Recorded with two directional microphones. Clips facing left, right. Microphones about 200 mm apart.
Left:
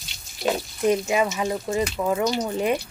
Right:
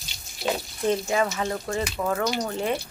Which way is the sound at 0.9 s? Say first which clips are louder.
Left 3 dB; 15° left (ahead or behind).